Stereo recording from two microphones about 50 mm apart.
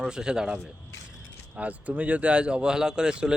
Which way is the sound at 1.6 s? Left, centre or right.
Right.